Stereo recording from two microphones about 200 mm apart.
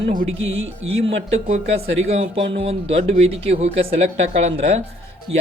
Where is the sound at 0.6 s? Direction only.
70° right (ahead or behind).